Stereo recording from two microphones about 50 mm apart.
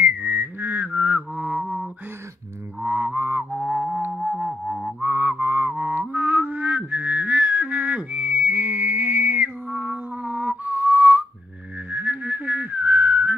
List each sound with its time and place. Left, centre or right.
0.0 s whistling: right
0.8 s mantra: right
1.6 s mantra: centre
2.8 s music: right; by 4.9 s centre
5.0 s music: right
11.9 s whistling: right